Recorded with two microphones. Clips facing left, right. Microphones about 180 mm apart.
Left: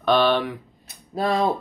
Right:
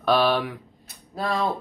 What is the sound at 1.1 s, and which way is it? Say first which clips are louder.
Speech: left 4 dB; 20° left (ahead or behind).